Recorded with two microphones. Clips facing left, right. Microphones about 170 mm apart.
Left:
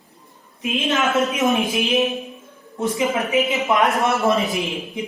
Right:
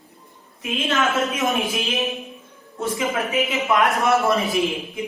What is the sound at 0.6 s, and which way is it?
A woman's voice, 20° left (ahead or behind).